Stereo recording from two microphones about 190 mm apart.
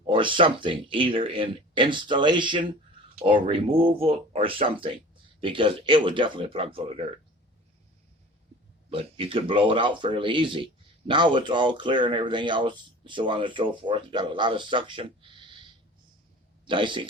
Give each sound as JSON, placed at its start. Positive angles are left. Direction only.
{"t": 0.0, "sound": "speech", "side_deg": -25}
{"t": 8.9, "sound": "speech", "side_deg": -30}
{"t": 16.6, "sound": "speech", "side_deg": -25}